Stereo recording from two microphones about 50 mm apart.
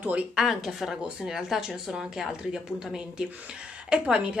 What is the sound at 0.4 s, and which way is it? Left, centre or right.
Speech, centre.